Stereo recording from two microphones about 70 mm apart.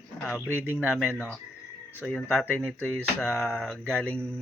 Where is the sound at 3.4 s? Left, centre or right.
Centre.